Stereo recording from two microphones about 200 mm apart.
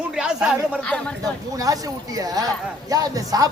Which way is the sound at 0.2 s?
5° right (ahead or behind).